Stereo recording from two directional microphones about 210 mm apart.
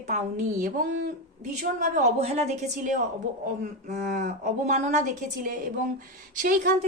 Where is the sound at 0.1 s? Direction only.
40° right (ahead or behind).